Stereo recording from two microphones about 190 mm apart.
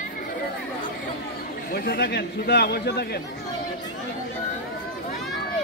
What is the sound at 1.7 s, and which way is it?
A man's voice, 55° left (ahead or behind).